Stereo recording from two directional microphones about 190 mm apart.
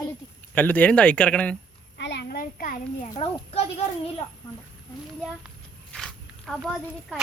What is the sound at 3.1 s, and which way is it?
Speech, 30° left (ahead or behind).